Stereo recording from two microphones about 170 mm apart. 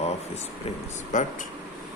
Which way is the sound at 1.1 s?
45° left (ahead or behind).